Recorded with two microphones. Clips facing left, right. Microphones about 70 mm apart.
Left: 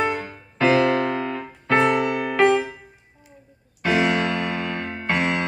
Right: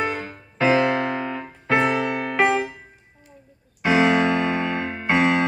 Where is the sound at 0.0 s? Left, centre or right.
Centre.